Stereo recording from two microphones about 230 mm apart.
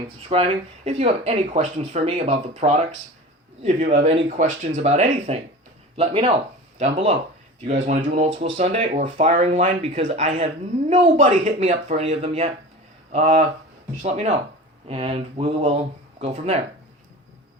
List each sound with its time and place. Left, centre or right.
0.3 s speech: right